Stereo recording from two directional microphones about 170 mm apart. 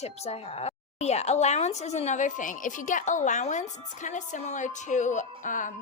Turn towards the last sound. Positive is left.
turn(degrees=50)  # may be behind; listen again after turning